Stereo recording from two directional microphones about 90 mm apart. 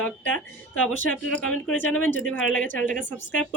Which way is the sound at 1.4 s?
10° left (ahead or behind).